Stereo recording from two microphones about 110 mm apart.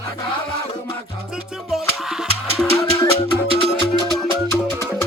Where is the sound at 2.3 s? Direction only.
65° right (ahead or behind).